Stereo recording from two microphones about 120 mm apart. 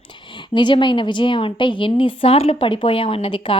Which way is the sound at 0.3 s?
40° left (ahead or behind).